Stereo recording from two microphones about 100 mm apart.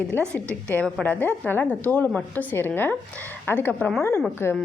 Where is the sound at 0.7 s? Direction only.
10° left (ahead or behind).